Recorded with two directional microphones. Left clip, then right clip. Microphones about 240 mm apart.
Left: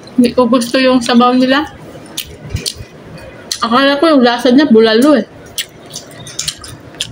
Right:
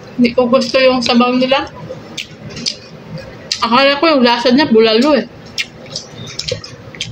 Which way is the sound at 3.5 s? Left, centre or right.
Left.